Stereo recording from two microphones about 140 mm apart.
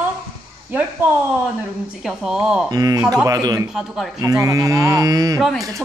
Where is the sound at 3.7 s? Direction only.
Centre (ahead or behind).